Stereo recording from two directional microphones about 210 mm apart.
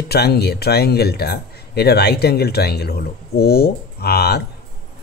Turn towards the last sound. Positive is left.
turn(degrees=50)  # may be behind; listen again after turning